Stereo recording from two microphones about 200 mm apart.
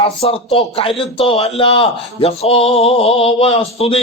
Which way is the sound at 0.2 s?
30° left (ahead or behind).